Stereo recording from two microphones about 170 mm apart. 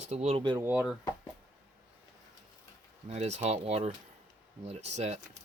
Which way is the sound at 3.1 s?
40° right (ahead or behind).